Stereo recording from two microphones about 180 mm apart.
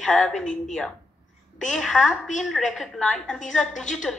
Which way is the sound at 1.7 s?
Centre (ahead or behind).